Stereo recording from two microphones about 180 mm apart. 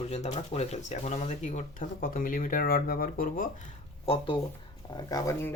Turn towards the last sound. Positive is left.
turn(degrees=20)  # may be behind; listen again after turning